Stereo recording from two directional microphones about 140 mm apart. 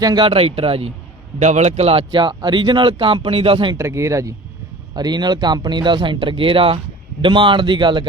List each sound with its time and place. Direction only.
0.0 s speech: 30° right (ahead or behind)
1.4 s speech: 55° right (ahead or behind); by 3.8 s 40° right (ahead or behind)
3.8 s speech: 20° right (ahead or behind)